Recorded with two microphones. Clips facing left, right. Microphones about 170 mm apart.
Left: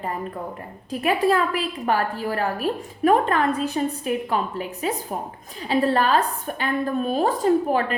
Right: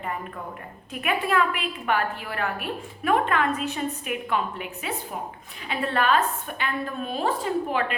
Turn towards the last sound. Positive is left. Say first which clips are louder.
# left 6 dB
turn(degrees=40)  # may be behind; listen again after turning